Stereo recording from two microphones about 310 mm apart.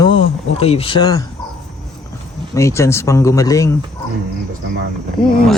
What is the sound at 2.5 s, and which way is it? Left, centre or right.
Speech, centre.